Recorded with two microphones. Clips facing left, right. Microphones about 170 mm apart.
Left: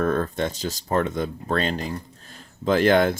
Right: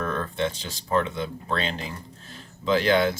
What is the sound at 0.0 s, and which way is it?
Speech, 40° left (ahead or behind).